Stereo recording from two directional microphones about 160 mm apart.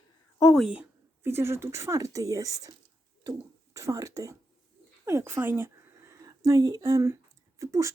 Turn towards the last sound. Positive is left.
turn(degrees=-20)  # may be behind; listen again after turning